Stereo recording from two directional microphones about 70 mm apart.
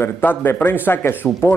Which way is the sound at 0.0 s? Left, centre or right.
Left.